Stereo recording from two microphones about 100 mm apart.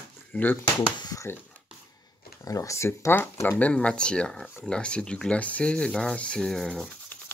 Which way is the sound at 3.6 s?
10° left (ahead or behind).